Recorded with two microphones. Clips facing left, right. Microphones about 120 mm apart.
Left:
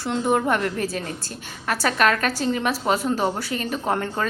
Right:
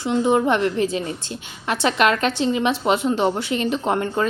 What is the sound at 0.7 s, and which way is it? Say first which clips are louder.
A woman's voice: right 5 dB; 20° right (ahead or behind).